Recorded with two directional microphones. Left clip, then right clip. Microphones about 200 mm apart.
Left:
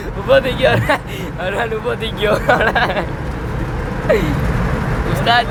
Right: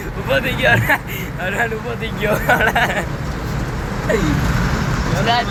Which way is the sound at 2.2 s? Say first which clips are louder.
Left 2 dB; 10° left (ahead or behind).